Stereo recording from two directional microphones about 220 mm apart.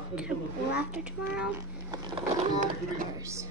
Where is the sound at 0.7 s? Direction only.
5° right (ahead or behind).